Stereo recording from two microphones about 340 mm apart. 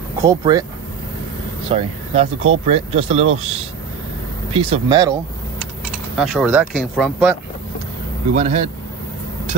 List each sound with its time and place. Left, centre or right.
0.2 s speech: centre
1.7 s speech: centre
6.1 s speech: centre
8.4 s speech: centre